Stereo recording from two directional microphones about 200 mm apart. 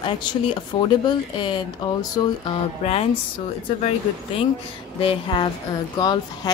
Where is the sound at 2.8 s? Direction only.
30° left (ahead or behind).